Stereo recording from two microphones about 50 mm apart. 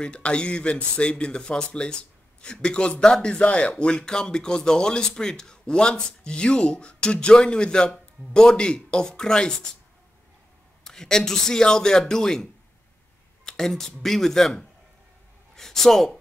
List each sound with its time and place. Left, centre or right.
0.0 s a man's voice: left
10.8 s a man's voice: centre
13.5 s a man's voice: centre